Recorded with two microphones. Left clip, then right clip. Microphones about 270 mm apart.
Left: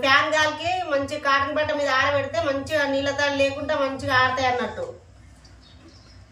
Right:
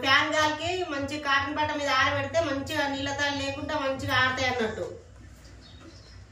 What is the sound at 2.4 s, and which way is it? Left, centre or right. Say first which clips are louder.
A woman's voice: left 6 dB; centre.